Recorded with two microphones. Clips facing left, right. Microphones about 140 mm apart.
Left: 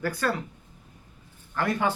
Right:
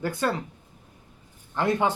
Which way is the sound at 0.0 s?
20° right (ahead or behind).